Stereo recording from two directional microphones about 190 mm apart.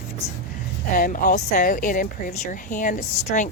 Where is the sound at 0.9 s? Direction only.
45° left (ahead or behind).